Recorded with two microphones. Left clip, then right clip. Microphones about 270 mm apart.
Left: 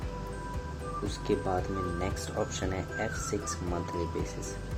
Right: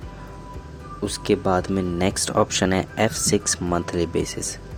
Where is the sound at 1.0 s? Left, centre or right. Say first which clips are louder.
Right 11 dB; right.